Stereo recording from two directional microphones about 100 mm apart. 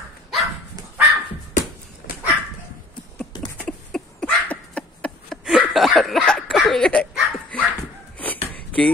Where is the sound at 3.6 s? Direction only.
10° left (ahead or behind).